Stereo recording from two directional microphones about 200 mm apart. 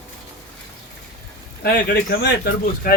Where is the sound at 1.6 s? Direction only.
50° left (ahead or behind).